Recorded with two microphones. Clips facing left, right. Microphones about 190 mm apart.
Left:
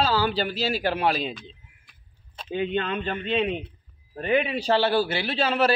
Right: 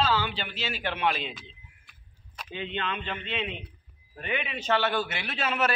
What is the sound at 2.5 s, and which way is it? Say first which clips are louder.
A man's voice: left 7 dB; 45° left (ahead or behind).